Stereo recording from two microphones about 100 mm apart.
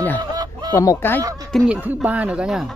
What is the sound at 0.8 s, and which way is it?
Speech, 35° left (ahead or behind).